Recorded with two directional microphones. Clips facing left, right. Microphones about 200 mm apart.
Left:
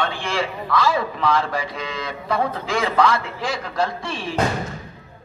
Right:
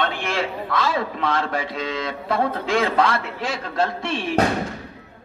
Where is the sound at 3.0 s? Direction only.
25° right (ahead or behind).